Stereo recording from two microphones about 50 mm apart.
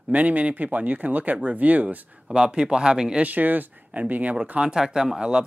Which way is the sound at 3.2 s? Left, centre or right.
Right.